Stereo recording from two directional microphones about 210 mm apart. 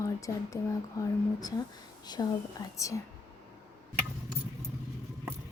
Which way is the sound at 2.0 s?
20° left (ahead or behind).